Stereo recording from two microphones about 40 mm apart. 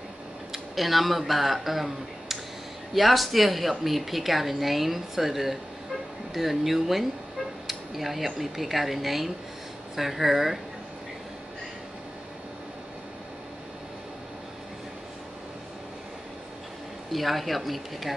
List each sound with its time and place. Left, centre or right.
0.5 s a woman's voice: centre
17.1 s a woman's voice: centre